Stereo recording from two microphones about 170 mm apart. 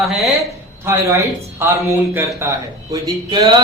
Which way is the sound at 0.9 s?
15° right (ahead or behind).